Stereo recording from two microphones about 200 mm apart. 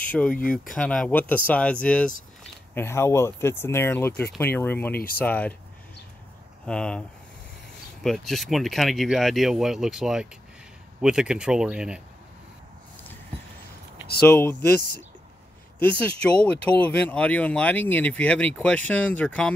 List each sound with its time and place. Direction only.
0.1 s speech: 5° left (ahead or behind)
4.9 s speech: 50° left (ahead or behind)
5.2 s speech: 5° left (ahead or behind)
6.6 s speech: 5° left (ahead or behind)
14.2 s speech: 10° left (ahead or behind)
15.8 s speech: 5° left (ahead or behind)